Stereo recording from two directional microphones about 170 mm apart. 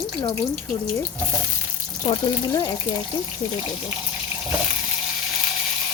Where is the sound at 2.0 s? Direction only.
20° left (ahead or behind).